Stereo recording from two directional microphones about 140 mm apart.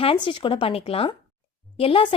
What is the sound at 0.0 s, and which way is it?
Speech, 40° left (ahead or behind).